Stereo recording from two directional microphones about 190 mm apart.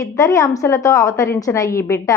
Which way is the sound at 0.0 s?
15° left (ahead or behind).